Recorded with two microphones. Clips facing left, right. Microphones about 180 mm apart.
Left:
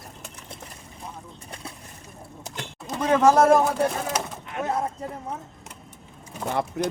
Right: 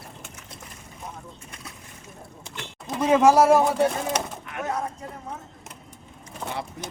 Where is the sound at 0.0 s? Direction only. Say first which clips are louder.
Even; 35° left (ahead or behind).